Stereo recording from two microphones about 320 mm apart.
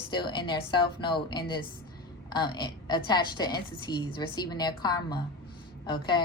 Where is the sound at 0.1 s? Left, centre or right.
Centre.